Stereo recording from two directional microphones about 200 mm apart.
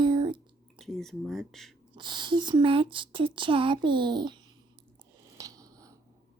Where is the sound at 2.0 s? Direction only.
25° right (ahead or behind).